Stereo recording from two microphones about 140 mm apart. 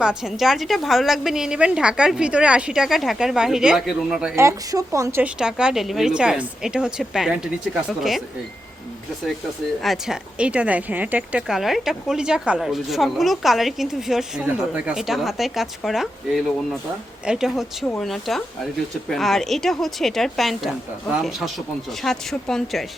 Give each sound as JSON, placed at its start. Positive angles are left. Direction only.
{"t": 0.0, "sound": "speech", "side_deg": -5}
{"t": 4.4, "sound": "a woman's voice", "side_deg": -20}
{"t": 5.2, "sound": "speech", "side_deg": -5}
{"t": 9.8, "sound": "speech", "side_deg": 0}